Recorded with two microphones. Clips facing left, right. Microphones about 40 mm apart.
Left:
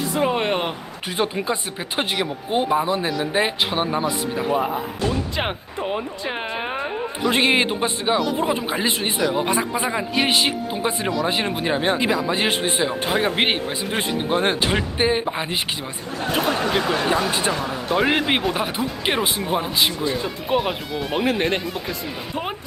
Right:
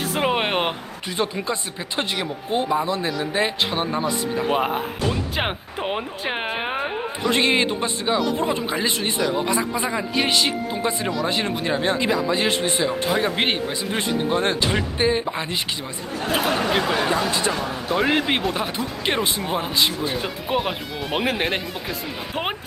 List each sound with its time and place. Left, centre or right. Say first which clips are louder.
0.2 s a sound: even; right
1.2 s speech: left 2 dB; centre
4.4 s speech: even; right
5.0 s speech: left 2 dB; centre
5.8 s speech: even; right
7.3 s speech: left 1 dB; centre
9.4 s speech: left 1 dB; left
9.8 s speech: left 1 dB; centre
16.3 s speech: even; centre
17.9 s speech: left 1 dB; centre
20.5 s speech: left 3 dB; centre
21.1 s speech: left 1 dB; centre